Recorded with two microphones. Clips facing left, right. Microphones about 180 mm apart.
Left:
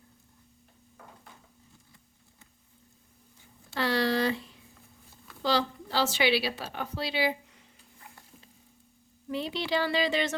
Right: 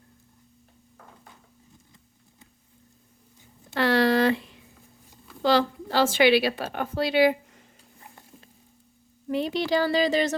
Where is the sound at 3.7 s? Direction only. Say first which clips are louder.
Right 6 dB; 60° right (ahead or behind).